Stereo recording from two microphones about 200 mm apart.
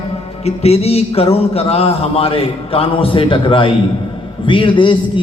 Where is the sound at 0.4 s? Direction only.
30° left (ahead or behind).